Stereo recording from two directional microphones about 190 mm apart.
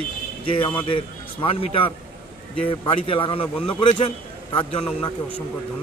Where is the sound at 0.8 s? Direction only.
25° left (ahead or behind).